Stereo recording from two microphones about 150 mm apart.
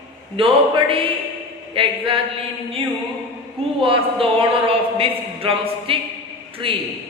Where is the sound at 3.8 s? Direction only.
35° right (ahead or behind).